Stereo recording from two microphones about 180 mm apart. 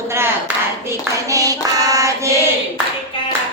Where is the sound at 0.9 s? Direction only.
20° right (ahead or behind).